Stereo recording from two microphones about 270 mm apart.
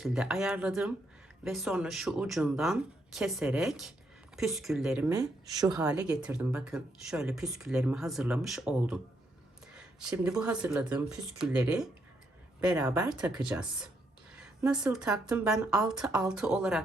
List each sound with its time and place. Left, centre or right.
0.0 s speech: centre
6.0 s speech: centre